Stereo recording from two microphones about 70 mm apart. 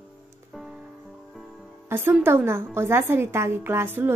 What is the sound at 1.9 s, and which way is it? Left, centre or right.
A woman's voice, right.